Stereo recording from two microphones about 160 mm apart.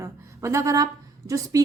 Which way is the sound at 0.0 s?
20° right (ahead or behind).